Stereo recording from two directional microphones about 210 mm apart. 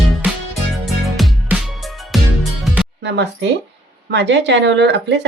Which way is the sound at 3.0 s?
55° right (ahead or behind).